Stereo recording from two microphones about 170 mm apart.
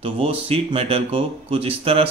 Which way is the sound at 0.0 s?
35° right (ahead or behind).